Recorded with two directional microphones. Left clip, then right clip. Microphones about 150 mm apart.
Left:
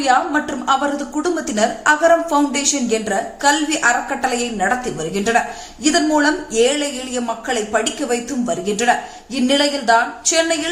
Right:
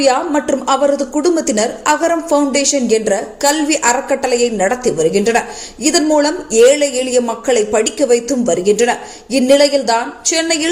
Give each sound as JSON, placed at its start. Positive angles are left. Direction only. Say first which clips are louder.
{"t": 0.0, "sound": "a woman's voice", "louder": "right 3 dB", "side_deg": -15}